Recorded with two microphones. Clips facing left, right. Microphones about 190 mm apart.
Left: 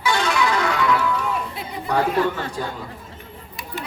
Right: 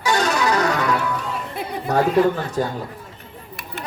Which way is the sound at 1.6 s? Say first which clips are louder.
Right 5 dB; 55° right (ahead or behind).